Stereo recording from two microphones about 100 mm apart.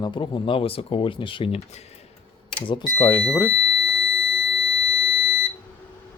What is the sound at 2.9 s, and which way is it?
Speech, 25° left (ahead or behind).